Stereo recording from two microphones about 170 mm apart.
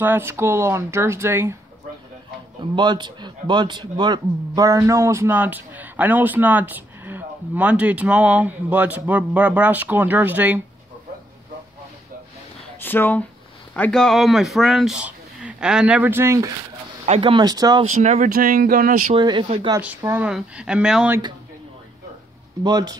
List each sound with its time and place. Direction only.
0.0 s a man's voice: 15° right (ahead or behind)
2.7 s a man's voice: 25° right (ahead or behind); by 10.6 s 10° right (ahead or behind)
12.8 s speech: 10° left (ahead or behind); by 16.5 s 20° right (ahead or behind)
17.0 s speech: 35° right (ahead or behind)
17.9 s speech: 45° right (ahead or behind)
19.1 s speech: 30° right (ahead or behind)
19.8 s a man's voice: 10° right (ahead or behind)
22.6 s speech: 20° right (ahead or behind)